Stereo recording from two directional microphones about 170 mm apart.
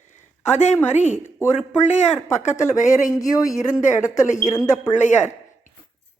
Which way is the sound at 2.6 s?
20° left (ahead or behind).